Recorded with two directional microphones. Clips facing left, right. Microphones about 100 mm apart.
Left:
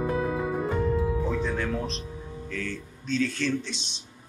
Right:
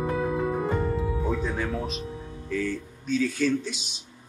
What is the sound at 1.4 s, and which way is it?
Speech, 5° right (ahead or behind).